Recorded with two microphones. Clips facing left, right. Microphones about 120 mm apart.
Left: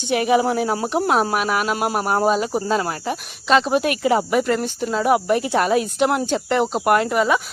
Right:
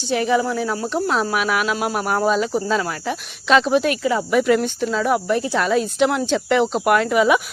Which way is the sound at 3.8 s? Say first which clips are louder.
Left 1 dB; 60° left (ahead or behind).